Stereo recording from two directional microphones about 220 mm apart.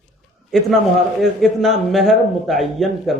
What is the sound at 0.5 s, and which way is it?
A man's voice, centre (ahead or behind).